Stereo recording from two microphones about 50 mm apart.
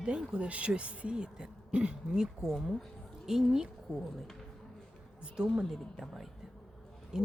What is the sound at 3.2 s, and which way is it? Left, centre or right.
Speech, centre.